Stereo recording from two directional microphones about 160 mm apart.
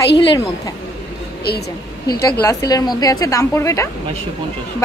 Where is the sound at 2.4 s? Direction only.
20° left (ahead or behind).